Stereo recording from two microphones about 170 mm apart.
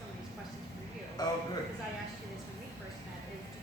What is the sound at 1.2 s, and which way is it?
Speech, 25° left (ahead or behind).